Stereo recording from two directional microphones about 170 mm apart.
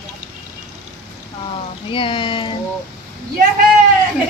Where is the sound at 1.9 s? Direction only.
30° left (ahead or behind).